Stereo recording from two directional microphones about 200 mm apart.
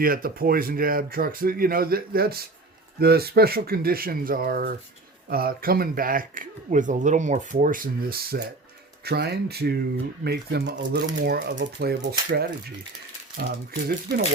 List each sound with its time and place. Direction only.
0.0 s speech: 45° right (ahead or behind)